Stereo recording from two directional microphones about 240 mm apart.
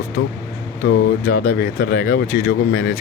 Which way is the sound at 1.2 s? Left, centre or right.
Left.